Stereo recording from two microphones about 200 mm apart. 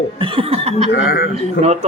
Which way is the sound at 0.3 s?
30° right (ahead or behind).